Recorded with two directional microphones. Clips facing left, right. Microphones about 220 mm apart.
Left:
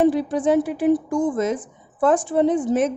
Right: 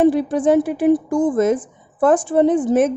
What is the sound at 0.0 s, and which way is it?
A woman's voice, 55° right (ahead or behind).